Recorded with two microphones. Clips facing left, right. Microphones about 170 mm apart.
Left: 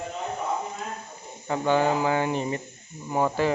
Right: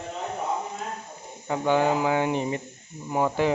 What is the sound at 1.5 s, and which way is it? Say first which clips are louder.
Speech: even; 15° right (ahead or behind).